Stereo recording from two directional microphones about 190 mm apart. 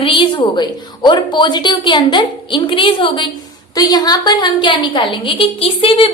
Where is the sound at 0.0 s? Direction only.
25° left (ahead or behind).